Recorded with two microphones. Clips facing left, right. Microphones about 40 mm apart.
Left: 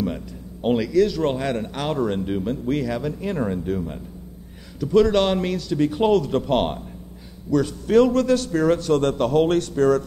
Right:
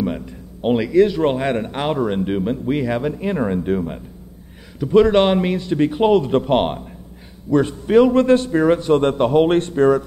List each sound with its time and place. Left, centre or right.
0.0 s a man's voice: centre
7.5 s a man's voice: right